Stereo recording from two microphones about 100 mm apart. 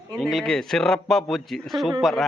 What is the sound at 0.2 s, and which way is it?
A man's voice, centre (ahead or behind).